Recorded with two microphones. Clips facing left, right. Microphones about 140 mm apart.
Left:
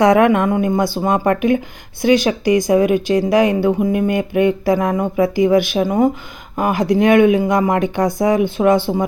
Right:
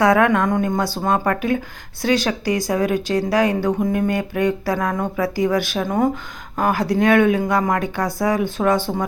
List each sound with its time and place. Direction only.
0.0 s speech: 20° left (ahead or behind)